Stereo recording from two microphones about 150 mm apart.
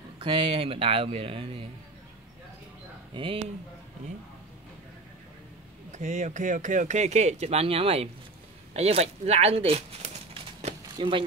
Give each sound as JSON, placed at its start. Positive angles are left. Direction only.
{"t": 0.2, "sound": "speech", "side_deg": -35}
{"t": 3.2, "sound": "speech", "side_deg": -35}
{"t": 5.9, "sound": "speech", "side_deg": -55}
{"t": 11.0, "sound": "speech", "side_deg": -35}